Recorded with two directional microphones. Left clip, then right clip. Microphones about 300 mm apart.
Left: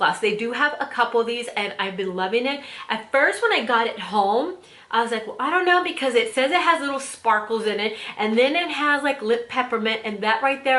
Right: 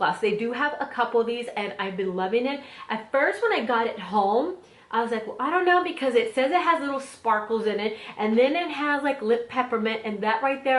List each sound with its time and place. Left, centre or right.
0.0 s speech: centre
4.1 s speech: centre
4.9 s speech: centre